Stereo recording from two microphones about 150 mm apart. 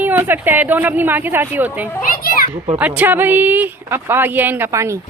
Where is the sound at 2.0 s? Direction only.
75° left (ahead or behind).